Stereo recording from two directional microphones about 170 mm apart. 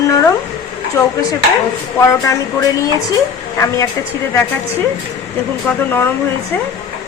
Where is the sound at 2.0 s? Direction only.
20° left (ahead or behind).